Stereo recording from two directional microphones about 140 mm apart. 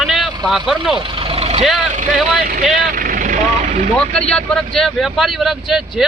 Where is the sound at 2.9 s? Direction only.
75° right (ahead or behind); by 3.8 s 50° right (ahead or behind).